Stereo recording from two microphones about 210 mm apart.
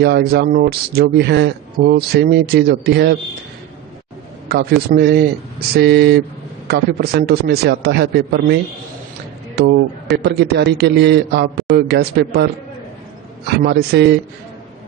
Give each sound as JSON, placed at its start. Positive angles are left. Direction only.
{"t": 0.0, "sound": "speech", "side_deg": -50}
{"t": 4.5, "sound": "speech", "side_deg": -50}
{"t": 9.6, "sound": "speech", "side_deg": -50}
{"t": 13.5, "sound": "speech", "side_deg": -50}